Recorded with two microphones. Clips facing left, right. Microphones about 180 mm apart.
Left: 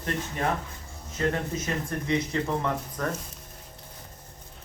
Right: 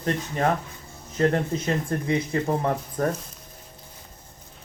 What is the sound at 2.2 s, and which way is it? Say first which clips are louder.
Speech: right 3 dB; 50° right (ahead or behind).